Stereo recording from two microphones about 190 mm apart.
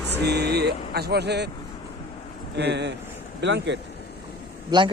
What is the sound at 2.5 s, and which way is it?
Speech, 65° right (ahead or behind).